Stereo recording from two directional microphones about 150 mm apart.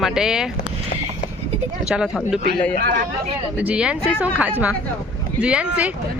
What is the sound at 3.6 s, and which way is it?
Speech, 10° right (ahead or behind).